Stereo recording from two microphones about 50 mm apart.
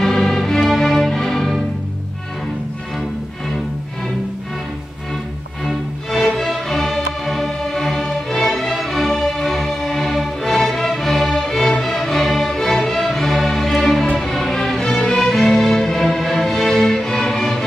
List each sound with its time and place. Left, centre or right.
0.0 s music: centre
3.0 s music: centre
5.7 s music: centre